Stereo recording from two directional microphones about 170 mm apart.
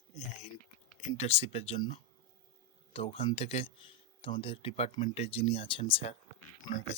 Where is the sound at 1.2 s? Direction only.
35° left (ahead or behind).